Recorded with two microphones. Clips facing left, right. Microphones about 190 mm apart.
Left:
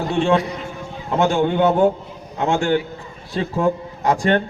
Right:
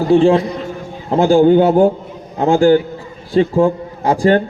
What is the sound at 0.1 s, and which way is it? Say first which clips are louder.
A man's voice: right 8 dB; 30° right (ahead or behind).